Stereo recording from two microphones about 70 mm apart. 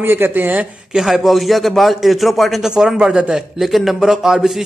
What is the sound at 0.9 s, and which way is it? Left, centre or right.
A man's voice, centre.